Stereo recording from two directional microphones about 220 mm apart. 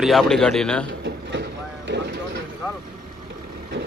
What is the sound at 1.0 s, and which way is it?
Vehicle, 50° right (ahead or behind).